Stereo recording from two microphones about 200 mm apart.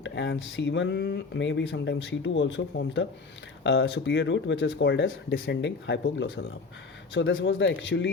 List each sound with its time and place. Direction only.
0.0 s speech: 65° left (ahead or behind)